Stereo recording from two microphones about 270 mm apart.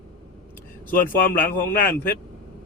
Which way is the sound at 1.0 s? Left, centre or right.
Left.